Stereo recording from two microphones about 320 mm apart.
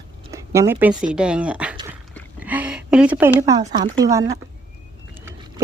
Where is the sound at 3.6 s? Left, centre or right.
Right.